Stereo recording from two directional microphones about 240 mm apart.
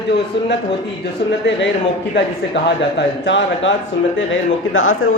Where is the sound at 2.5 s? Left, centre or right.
Left.